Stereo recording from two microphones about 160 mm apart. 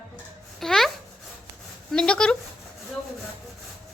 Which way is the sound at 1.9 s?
5° left (ahead or behind).